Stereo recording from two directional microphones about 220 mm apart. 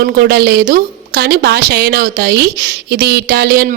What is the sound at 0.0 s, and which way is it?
Speech, 45° right (ahead or behind).